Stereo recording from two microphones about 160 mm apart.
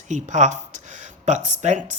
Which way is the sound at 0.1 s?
50° right (ahead or behind).